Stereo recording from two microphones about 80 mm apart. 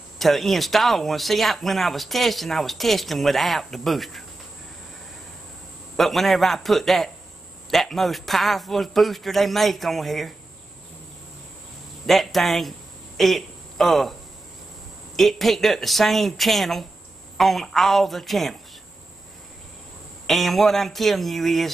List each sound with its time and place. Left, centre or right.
0.2 s speech: centre
5.9 s speech: centre
12.1 s speech: centre
15.1 s speech: centre
20.2 s speech: centre